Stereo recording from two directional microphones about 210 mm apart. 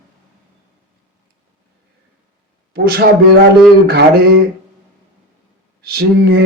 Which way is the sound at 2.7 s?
45° right (ahead or behind).